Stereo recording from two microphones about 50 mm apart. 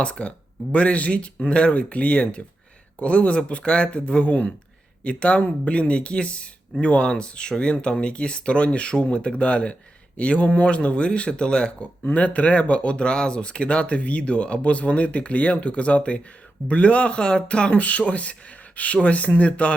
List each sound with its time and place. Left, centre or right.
0.0 s speech: left